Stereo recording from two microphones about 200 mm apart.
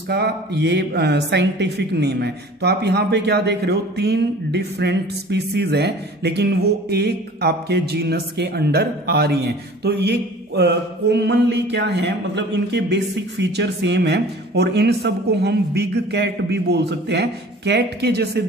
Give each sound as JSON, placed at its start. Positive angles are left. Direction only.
{"t": 0.1, "sound": "speech", "side_deg": -55}